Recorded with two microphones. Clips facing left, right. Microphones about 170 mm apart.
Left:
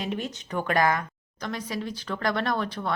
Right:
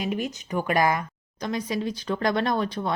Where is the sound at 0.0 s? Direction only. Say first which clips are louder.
Right 3 dB; 10° right (ahead or behind).